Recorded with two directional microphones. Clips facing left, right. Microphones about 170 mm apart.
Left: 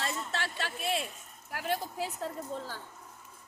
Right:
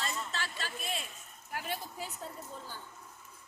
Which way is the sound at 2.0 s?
90° left.